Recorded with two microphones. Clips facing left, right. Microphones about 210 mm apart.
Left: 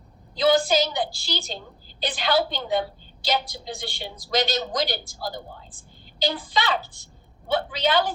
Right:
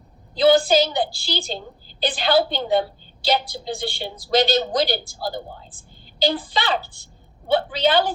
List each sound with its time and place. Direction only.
0.3 s a woman's voice: 30° right (ahead or behind)